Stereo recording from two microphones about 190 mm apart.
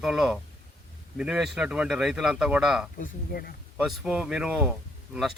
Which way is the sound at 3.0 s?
50° left (ahead or behind).